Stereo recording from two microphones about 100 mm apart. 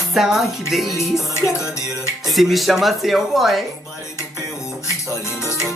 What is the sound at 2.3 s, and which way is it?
Speech, centre (ahead or behind).